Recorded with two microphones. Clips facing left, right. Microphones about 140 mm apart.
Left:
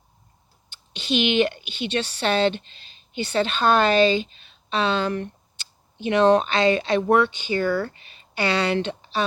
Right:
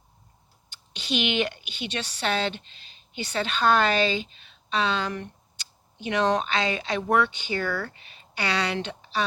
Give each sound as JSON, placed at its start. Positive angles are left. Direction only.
{"t": 0.9, "sound": "a woman's voice", "side_deg": 25}
{"t": 5.5, "sound": "tick", "side_deg": 25}
{"t": 6.6, "sound": "speech", "side_deg": 60}
{"t": 7.3, "sound": "a woman's voice", "side_deg": 20}